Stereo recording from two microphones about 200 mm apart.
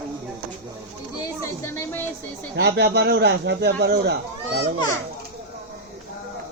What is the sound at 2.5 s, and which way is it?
Speech, 55° right (ahead or behind).